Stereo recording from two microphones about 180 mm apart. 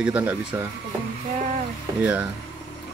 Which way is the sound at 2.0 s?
10° right (ahead or behind).